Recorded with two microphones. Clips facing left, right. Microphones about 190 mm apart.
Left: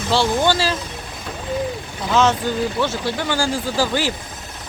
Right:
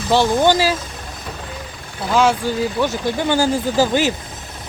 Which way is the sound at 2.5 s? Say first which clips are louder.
Right 1 dB; 10° right (ahead or behind).